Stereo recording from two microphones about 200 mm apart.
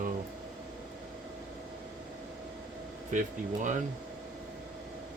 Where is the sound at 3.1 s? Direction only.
40° right (ahead or behind).